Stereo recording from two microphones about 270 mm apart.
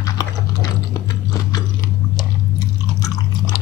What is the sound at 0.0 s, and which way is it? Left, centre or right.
Chewing, centre.